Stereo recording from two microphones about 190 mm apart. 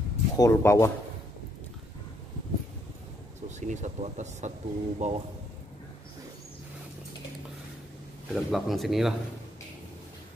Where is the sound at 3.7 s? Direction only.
40° right (ahead or behind).